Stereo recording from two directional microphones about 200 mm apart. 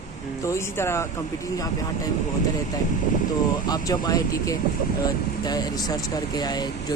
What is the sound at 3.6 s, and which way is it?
Speech, 20° left (ahead or behind).